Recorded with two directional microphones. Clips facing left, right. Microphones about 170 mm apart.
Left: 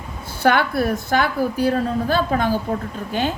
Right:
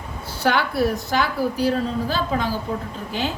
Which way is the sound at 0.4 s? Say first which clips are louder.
Left 2 dB; 55° left (ahead or behind).